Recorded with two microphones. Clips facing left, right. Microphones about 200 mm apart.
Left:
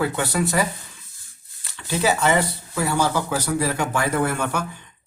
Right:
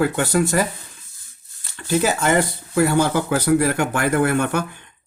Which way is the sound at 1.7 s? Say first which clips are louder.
Right 2 dB; 50° right (ahead or behind).